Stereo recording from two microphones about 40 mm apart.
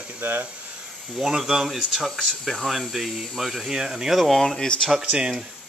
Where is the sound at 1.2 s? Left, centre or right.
Centre.